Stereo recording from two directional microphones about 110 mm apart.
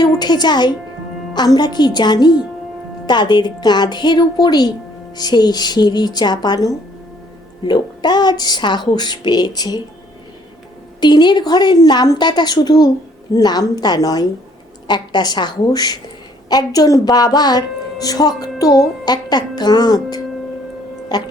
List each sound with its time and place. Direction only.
0.0 s a woman's voice: 40° left (ahead or behind)
11.0 s a woman's voice: 40° left (ahead or behind)